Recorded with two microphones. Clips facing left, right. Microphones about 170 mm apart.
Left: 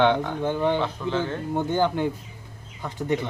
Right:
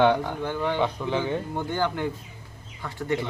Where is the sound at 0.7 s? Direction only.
15° right (ahead or behind).